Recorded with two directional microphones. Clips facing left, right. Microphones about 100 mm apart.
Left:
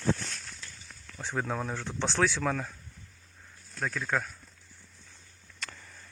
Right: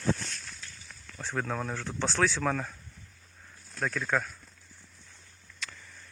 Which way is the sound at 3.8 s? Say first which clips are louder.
Right 1 dB; 5° left (ahead or behind).